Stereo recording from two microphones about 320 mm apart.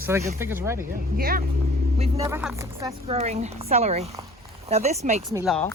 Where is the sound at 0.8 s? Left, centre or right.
Right.